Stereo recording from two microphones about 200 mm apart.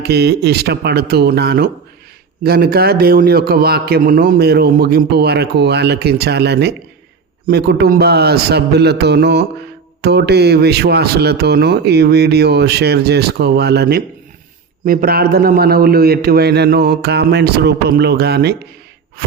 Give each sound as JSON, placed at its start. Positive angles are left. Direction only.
{"t": 0.0, "sound": "a man's voice", "side_deg": -55}